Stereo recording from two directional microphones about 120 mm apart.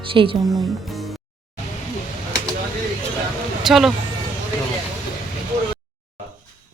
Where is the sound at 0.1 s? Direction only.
50° right (ahead or behind).